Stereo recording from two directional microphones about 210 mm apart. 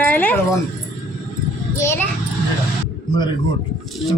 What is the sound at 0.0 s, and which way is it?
Dog, 10° left (ahead or behind).